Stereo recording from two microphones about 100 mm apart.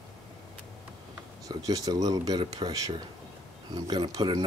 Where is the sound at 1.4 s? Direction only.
40° right (ahead or behind).